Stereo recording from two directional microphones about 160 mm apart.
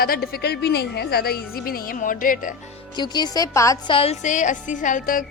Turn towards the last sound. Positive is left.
turn(degrees=55)  # may be behind; listen again after turning